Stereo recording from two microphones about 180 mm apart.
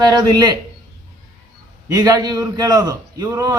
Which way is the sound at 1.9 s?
20° right (ahead or behind).